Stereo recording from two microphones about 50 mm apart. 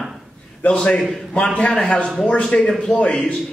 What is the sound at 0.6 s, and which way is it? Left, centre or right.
Speech, left.